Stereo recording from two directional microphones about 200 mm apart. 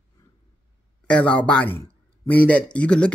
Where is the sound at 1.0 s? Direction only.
5° left (ahead or behind).